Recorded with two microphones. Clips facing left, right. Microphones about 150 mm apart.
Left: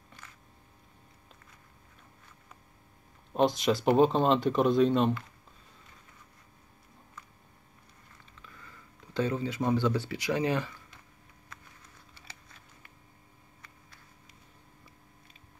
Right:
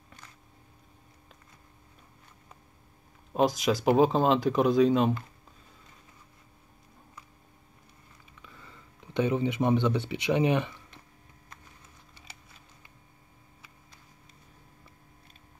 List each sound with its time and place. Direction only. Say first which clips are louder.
3.3 s speech: right 1 dB; centre (ahead or behind)
8.4 s speech: right 2 dB; 20° right (ahead or behind)